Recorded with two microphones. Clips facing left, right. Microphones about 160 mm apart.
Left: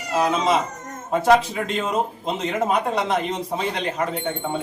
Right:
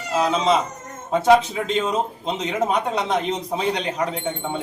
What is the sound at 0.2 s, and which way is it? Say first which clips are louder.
Speech: right 1 dB; 10° left (ahead or behind).